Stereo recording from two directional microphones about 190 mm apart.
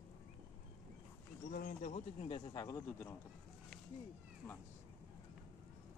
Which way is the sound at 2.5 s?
20° left (ahead or behind).